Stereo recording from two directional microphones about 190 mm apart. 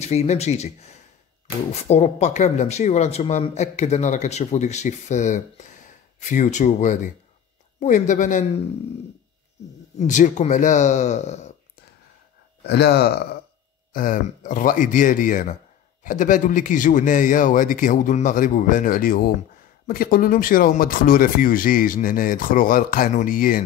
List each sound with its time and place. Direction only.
0.0 s speech: 35° left (ahead or behind)
9.9 s speech: 40° left (ahead or behind)
12.6 s speech: 60° left (ahead or behind)
13.9 s speech: 45° left (ahead or behind)